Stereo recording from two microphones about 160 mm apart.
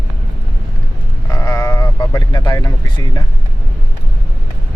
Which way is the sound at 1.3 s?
25° left (ahead or behind).